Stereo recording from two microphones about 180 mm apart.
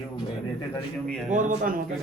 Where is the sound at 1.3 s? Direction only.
45° right (ahead or behind).